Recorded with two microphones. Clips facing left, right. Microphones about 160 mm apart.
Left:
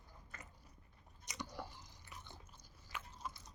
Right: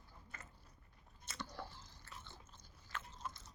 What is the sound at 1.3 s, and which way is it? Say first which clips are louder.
Biting: left 1 dB; 15° left (ahead or behind).